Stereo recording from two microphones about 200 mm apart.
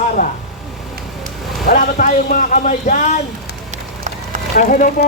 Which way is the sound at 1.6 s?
45° left (ahead or behind).